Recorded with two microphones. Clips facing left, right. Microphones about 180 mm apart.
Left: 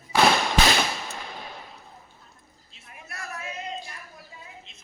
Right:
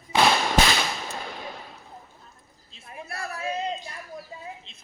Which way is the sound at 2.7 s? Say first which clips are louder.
Right 6 dB; 30° right (ahead or behind).